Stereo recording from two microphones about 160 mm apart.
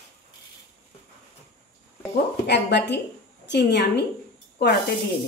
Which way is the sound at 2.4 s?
90° left.